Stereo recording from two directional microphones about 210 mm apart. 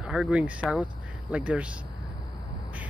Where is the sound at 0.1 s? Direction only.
5° right (ahead or behind).